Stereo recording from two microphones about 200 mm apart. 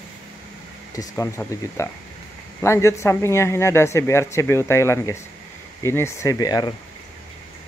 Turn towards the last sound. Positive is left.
turn(degrees=20)  # may be behind; listen again after turning